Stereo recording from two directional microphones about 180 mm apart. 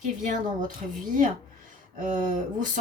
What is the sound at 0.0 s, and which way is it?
Speech, 45° right (ahead or behind).